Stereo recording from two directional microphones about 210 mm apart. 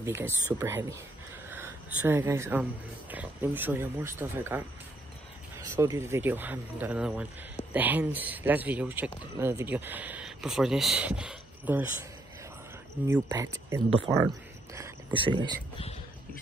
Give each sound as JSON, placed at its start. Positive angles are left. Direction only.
{"t": 0.0, "sound": "speech", "side_deg": -10}
{"t": 13.0, "sound": "speech", "side_deg": -15}